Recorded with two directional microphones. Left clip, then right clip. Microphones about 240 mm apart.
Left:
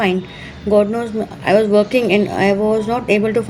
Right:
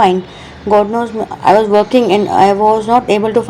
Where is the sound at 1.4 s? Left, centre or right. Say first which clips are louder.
Right 4 dB; centre.